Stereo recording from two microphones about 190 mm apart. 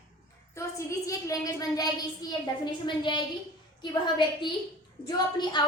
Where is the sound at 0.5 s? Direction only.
15° left (ahead or behind).